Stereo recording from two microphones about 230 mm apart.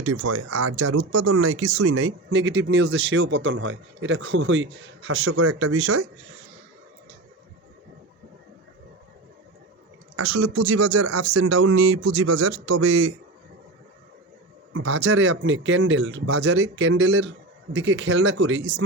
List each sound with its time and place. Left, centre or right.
0.0 s speech: right
5.3 s speech: right
10.2 s speech: right
14.7 s speech: right